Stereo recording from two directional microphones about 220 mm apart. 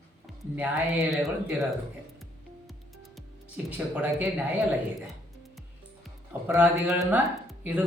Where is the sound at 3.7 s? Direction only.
5° right (ahead or behind).